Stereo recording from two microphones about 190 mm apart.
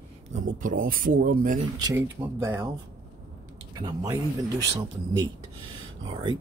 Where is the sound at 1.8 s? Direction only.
15° right (ahead or behind).